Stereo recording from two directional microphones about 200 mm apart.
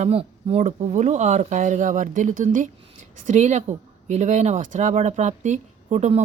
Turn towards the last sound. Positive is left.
turn(degrees=-35)  # may be behind; listen again after turning